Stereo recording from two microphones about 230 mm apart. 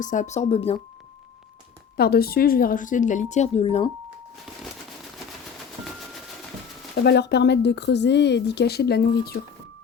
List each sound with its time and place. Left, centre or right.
0.0 s speech: left
2.0 s speech: left
6.9 s speech: left